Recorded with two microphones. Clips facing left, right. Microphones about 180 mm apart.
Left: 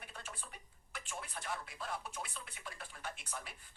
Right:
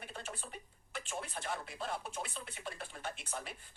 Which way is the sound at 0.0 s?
25° right (ahead or behind).